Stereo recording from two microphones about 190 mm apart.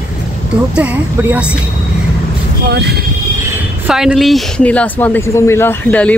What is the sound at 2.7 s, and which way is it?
Speech, 60° right (ahead or behind).